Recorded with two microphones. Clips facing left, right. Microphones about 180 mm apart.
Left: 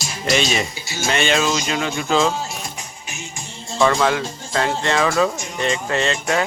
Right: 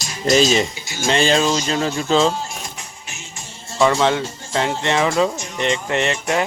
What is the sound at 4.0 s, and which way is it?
Speech, 25° right (ahead or behind).